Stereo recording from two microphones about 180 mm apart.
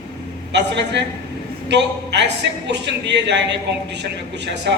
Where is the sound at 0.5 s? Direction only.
70° right (ahead or behind).